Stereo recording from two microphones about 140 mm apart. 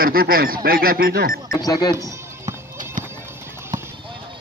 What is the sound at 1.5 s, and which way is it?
Speech, 30° left (ahead or behind).